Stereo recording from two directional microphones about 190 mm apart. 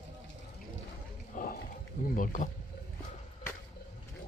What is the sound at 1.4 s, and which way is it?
Roaring cats, 45° left (ahead or behind).